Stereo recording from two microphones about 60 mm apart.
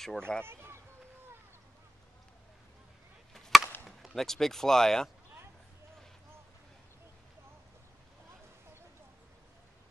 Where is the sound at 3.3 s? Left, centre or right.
Centre.